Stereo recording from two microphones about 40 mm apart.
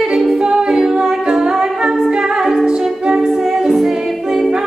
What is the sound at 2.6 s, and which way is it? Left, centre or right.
Music, centre.